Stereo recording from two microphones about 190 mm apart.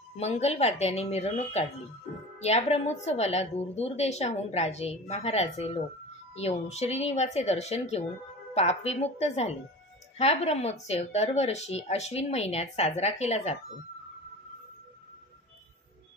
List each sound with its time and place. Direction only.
0.2 s a woman's voice: 35° left (ahead or behind)